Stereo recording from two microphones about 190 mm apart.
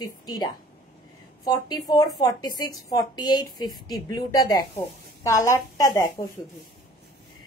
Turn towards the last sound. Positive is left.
turn(degrees=15)  # may be behind; listen again after turning